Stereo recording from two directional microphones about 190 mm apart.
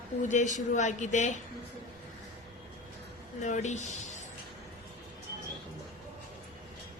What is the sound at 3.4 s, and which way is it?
Speech, 40° left (ahead or behind).